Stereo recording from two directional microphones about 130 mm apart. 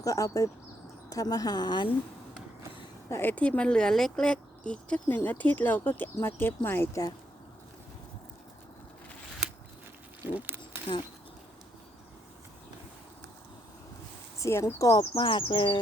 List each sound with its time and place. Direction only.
0.0 s a woman's voice: 25° left (ahead or behind)
3.1 s speech: 15° left (ahead or behind)
10.2 s speech: 15° right (ahead or behind)
14.3 s speech: 25° left (ahead or behind)
15.2 s a woman's voice: 40° left (ahead or behind)